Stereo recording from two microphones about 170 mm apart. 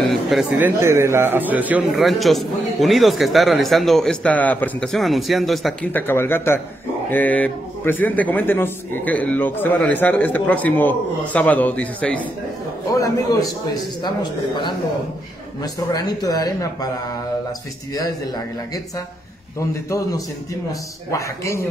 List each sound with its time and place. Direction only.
0.1 s a sound: centre (ahead or behind)
0.6 s a man's voice: 15° right (ahead or behind)
5.9 s a man's voice: 10° left (ahead or behind)
12.9 s a man's voice: 20° left (ahead or behind)
15.9 s a man's voice: 25° left (ahead or behind)
19.9 s a man's voice: 20° left (ahead or behind)